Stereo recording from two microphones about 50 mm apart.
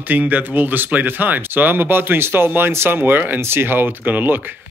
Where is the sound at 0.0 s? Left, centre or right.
Right.